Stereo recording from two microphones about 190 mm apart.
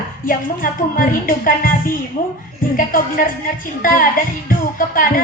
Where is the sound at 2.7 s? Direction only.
50° left (ahead or behind).